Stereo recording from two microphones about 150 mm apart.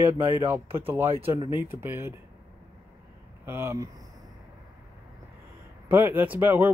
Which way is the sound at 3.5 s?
15° right (ahead or behind).